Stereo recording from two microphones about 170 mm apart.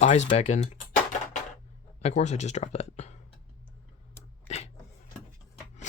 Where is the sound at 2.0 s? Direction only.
40° left (ahead or behind).